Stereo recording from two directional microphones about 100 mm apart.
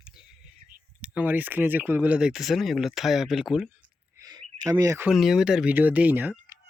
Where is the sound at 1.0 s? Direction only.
15° right (ahead or behind).